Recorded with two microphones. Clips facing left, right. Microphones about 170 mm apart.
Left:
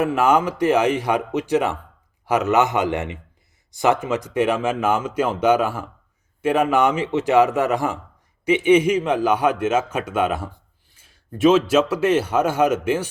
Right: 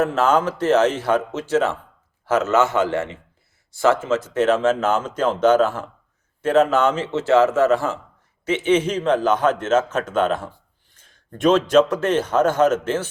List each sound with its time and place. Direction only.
0.0 s speech: 10° left (ahead or behind)